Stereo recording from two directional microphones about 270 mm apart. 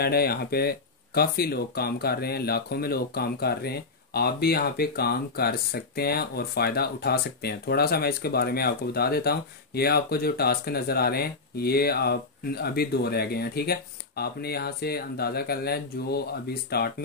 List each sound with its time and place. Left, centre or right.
0.0 s speech: left